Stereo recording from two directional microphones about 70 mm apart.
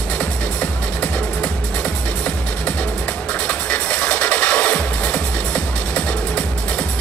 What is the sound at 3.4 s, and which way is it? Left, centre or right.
Music, left.